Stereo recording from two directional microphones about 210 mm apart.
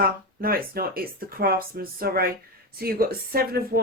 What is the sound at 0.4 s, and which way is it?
Speech, 45° right (ahead or behind).